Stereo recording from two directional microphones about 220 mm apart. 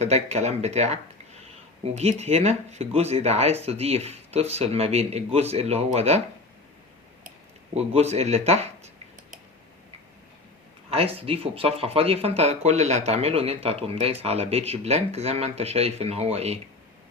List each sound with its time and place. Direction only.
0.0 s speech: 30° right (ahead or behind)
7.3 s speech: 30° right (ahead or behind)
10.8 s speech: 25° right (ahead or behind)